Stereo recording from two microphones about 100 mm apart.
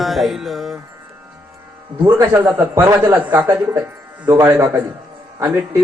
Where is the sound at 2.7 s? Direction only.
30° right (ahead or behind).